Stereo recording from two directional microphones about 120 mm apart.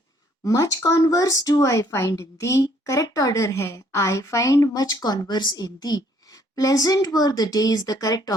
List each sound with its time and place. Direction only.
0.4 s a woman's voice: 25° left (ahead or behind)